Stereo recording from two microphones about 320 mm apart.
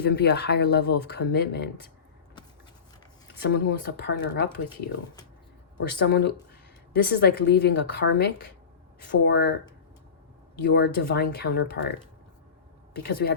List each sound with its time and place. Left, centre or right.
0.0 s speech: left
3.4 s speech: left
6.1 s speech: left